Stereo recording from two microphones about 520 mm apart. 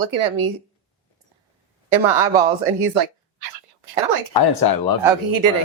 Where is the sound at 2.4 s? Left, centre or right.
Right.